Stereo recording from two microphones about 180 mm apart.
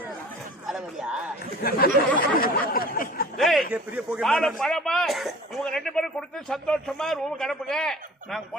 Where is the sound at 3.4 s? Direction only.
Centre (ahead or behind).